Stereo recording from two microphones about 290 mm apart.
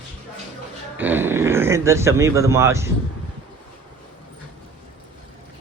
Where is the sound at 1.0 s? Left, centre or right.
Centre.